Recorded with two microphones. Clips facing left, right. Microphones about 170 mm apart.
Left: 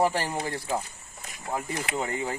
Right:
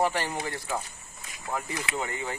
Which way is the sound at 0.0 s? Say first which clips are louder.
Left 2 dB; 40° left (ahead or behind).